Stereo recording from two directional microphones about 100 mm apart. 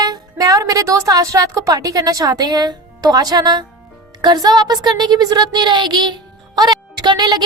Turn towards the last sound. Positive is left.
turn(degrees=-45)  # may be behind; listen again after turning